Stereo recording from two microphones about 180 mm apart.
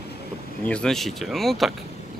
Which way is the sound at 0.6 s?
5° left (ahead or behind).